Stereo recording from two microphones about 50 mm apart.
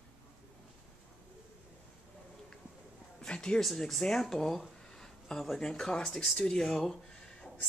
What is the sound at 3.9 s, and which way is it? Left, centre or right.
Speech, centre.